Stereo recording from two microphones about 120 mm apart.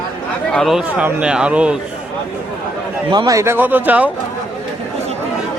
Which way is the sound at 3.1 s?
40° right (ahead or behind).